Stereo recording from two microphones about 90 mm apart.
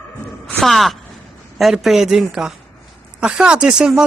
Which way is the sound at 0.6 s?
Centre (ahead or behind).